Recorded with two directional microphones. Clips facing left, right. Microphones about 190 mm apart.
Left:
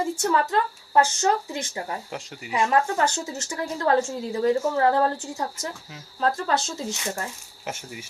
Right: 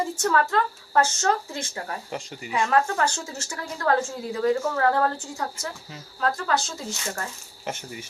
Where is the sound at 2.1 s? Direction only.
5° left (ahead or behind).